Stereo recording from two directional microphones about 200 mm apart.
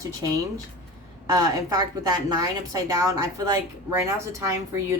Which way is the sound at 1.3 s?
20° right (ahead or behind).